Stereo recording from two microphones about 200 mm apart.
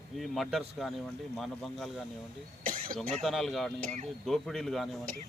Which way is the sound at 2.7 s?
45° right (ahead or behind).